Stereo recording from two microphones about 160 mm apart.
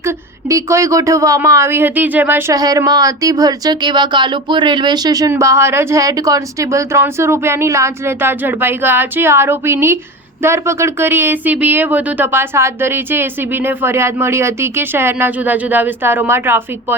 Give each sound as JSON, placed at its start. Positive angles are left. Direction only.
{"t": 0.0, "sound": "speech", "side_deg": -20}
{"t": 2.6, "sound": "speech", "side_deg": -25}